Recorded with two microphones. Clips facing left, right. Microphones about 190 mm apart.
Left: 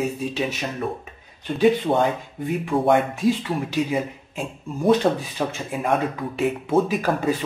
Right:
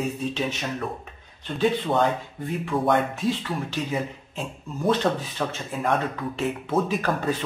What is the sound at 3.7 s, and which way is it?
Speech, 10° left (ahead or behind).